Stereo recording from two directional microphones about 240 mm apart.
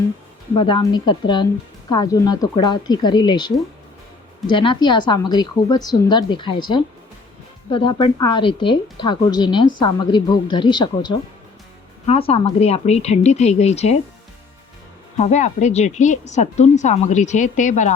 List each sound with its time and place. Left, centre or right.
0.5 s a woman's voice: centre
15.2 s a woman's voice: left